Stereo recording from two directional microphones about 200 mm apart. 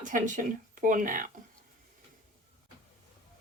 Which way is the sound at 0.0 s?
40° right (ahead or behind).